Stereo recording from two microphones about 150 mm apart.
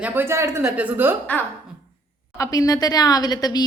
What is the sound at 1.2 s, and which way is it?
Speech, 10° left (ahead or behind).